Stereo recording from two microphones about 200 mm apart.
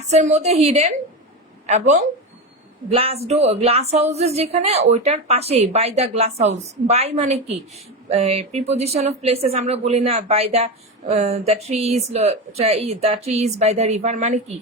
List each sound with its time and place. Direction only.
0.1 s speech: 35° right (ahead or behind)